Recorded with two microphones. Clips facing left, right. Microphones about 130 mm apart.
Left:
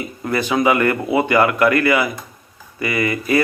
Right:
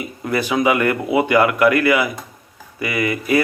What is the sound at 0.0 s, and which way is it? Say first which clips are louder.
Speech: even; 10° right (ahead or behind).